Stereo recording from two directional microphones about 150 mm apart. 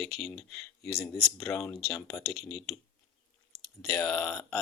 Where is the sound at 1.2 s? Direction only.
15° left (ahead or behind).